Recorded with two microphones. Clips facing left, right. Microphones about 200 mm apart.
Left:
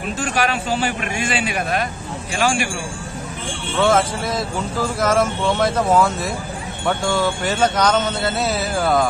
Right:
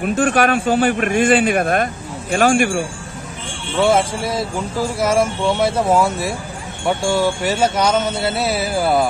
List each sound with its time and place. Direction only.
0.0 s speech: 55° right (ahead or behind)
3.8 s speech: 10° right (ahead or behind)